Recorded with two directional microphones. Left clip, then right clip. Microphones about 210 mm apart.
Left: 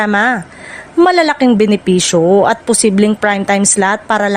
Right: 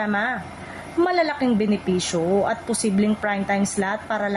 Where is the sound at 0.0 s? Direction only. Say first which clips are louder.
Left 11 dB; 50° left (ahead or behind).